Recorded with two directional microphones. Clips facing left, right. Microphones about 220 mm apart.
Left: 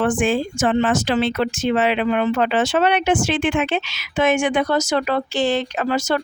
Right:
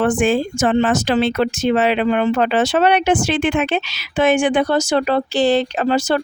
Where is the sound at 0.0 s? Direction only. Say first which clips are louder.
Right 3 dB; 40° right (ahead or behind).